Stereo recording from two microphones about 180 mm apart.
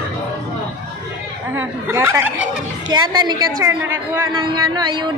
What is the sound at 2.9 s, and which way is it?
Carnatic music, 25° right (ahead or behind).